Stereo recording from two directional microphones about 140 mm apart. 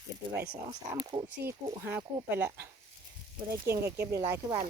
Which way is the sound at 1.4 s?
15° right (ahead or behind).